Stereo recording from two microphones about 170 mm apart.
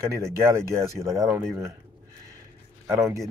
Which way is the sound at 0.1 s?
15° right (ahead or behind).